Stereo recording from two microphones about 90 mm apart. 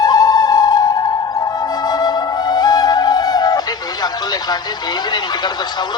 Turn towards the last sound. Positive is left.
turn(degrees=55)  # may be behind; listen again after turning